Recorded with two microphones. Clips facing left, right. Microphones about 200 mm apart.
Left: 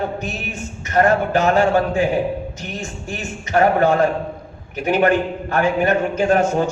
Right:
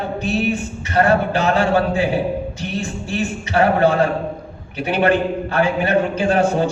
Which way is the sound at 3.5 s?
45° left (ahead or behind).